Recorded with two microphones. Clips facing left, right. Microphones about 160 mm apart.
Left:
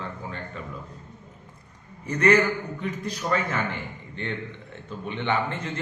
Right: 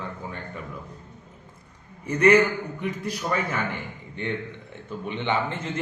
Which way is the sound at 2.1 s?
10° right (ahead or behind).